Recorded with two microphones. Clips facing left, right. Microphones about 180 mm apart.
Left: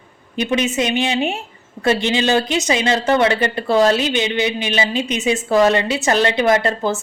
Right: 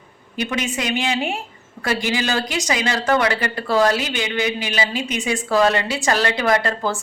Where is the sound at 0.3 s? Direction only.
20° left (ahead or behind).